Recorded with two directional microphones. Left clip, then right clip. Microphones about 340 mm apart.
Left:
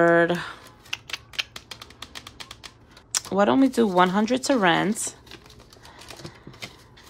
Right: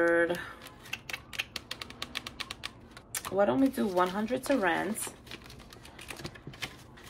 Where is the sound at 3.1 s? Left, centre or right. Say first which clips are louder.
Left 7 dB; centre.